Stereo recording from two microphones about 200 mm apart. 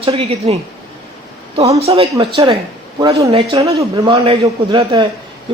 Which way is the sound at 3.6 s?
30° right (ahead or behind).